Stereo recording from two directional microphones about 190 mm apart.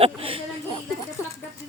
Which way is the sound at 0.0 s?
30° right (ahead or behind).